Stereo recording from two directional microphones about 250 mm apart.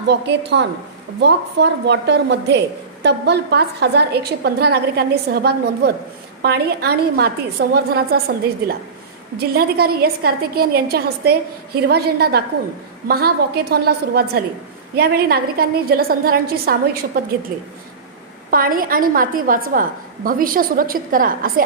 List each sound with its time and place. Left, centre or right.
0.1 s a woman's voice: right
9.5 s a woman's voice: right
18.5 s a woman's voice: right